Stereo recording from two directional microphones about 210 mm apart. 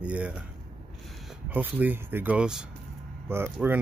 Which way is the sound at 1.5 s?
10° right (ahead or behind).